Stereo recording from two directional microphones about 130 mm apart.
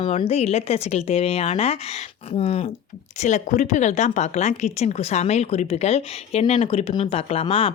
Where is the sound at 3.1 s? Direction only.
65° left (ahead or behind).